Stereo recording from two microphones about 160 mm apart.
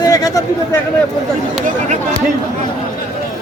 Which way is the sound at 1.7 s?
50° right (ahead or behind).